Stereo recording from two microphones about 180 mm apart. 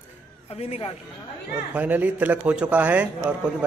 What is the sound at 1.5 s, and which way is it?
Speech, 10° right (ahead or behind).